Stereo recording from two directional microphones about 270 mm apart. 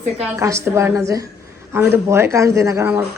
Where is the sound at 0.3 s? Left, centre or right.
Centre.